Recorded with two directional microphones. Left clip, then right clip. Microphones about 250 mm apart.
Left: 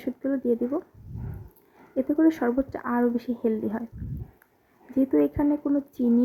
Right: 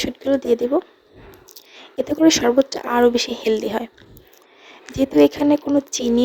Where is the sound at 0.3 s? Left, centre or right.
Right.